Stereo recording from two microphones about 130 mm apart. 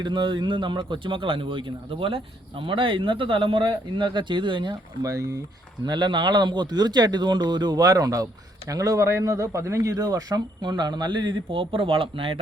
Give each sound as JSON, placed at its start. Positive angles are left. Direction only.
{"t": 0.0, "sound": "speech", "side_deg": -35}